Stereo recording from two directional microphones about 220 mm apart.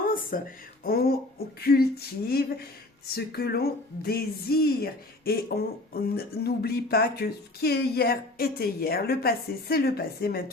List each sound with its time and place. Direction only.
0.3 s speech: 40° left (ahead or behind)